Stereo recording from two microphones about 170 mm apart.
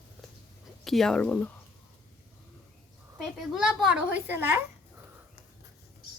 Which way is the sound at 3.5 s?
5° right (ahead or behind).